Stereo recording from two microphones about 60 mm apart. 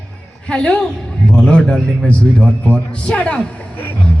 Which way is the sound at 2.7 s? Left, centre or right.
Centre.